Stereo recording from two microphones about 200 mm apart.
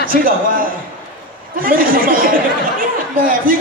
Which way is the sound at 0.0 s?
45° right (ahead or behind).